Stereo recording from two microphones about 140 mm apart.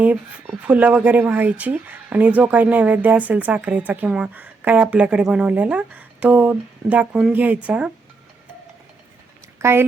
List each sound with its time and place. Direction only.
0.0 s speech: 10° right (ahead or behind)
9.6 s speech: 15° right (ahead or behind)